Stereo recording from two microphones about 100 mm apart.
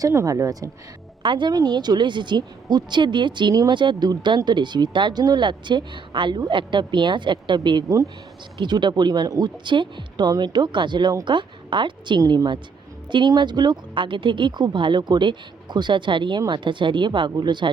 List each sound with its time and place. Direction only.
0.0 s speech: 35° right (ahead or behind)
1.2 s speech: 55° right (ahead or behind)
12.2 s speech: 35° right (ahead or behind)
13.1 s speech: 50° right (ahead or behind)